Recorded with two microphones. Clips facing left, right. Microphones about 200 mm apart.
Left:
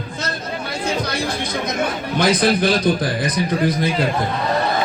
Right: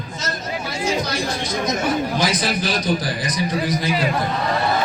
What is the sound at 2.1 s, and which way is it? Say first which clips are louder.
A man's voice: left 5 dB; 55° left (ahead or behind).